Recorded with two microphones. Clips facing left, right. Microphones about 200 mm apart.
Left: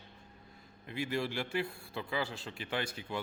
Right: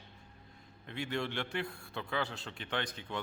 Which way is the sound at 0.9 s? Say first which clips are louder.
Left 2 dB; 5° left (ahead or behind).